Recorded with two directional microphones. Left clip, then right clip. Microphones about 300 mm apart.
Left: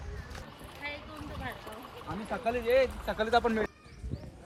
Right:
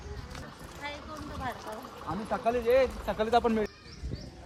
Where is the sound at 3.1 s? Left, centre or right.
Centre.